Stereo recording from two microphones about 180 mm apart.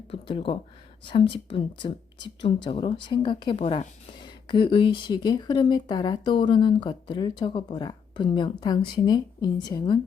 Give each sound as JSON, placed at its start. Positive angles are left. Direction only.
{"t": 0.1, "sound": "a woman's voice", "side_deg": 30}